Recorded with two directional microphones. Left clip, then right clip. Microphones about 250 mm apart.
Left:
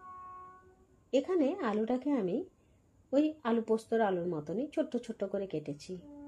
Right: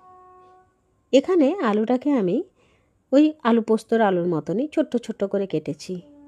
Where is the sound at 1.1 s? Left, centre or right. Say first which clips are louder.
Right 12 dB; right.